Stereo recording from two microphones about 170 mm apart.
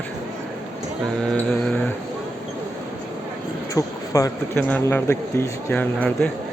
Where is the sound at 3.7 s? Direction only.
20° left (ahead or behind).